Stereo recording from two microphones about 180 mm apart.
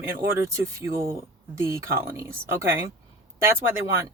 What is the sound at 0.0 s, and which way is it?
Speech, 15° right (ahead or behind).